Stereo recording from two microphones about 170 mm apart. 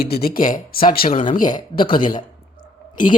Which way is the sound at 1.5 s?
30° left (ahead or behind).